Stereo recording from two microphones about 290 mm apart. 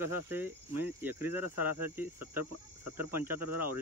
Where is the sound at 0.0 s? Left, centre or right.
Centre.